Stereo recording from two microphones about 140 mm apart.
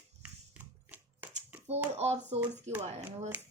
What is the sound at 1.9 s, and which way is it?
Speech, 50° right (ahead or behind).